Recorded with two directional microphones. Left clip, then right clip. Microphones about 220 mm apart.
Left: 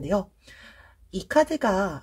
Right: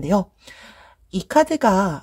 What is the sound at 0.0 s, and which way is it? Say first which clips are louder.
Speech: right 5 dB; 35° right (ahead or behind).